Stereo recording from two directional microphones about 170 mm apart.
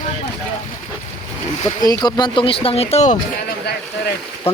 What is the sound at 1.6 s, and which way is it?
Speech, 25° left (ahead or behind).